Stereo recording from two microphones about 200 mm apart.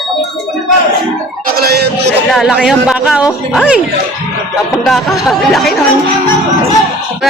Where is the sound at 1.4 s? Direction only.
50° right (ahead or behind).